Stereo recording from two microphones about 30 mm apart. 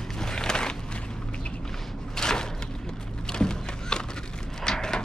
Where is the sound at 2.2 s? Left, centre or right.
Left.